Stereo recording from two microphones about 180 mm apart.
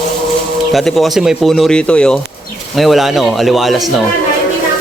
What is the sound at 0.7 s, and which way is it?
Speech, centre (ahead or behind).